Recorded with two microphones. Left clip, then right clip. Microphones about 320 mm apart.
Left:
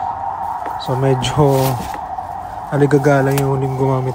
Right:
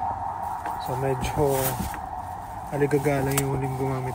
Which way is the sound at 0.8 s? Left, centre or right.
Left.